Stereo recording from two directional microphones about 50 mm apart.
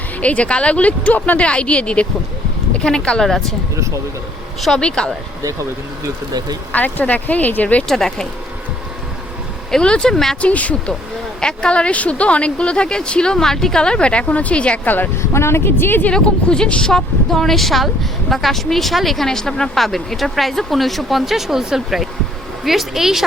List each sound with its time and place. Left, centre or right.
0.2 s speech: left
3.2 s speech: centre
4.8 s speech: centre
6.7 s speech: left
7.9 s speech: centre
9.7 s speech: centre
10.4 s speech: left
11.3 s speech: centre
14.8 s speech: left
15.2 s a woman's voice: left
16.1 s speech: centre
16.9 s a woman's voice: centre